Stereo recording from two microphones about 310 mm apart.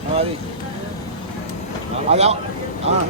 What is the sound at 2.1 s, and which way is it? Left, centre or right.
Speech, right.